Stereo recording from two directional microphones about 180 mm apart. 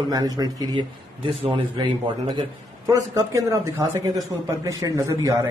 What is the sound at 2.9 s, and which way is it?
A man's voice, 15° right (ahead or behind).